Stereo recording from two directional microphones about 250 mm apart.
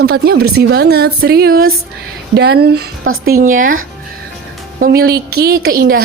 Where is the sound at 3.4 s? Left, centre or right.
Right.